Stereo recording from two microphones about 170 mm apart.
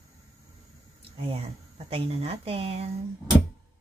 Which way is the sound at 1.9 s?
35° right (ahead or behind).